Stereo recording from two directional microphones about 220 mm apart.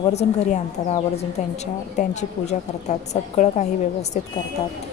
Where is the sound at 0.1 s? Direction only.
30° left (ahead or behind).